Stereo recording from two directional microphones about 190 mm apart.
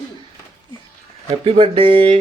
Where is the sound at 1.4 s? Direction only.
30° right (ahead or behind).